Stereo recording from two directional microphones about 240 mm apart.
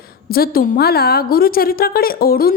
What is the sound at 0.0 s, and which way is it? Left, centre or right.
A woman's voice, left.